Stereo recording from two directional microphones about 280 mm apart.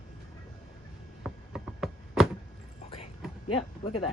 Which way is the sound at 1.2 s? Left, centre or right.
Centre.